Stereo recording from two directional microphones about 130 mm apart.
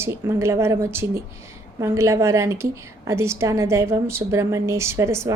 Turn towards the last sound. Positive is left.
turn(degrees=-20)  # may be behind; listen again after turning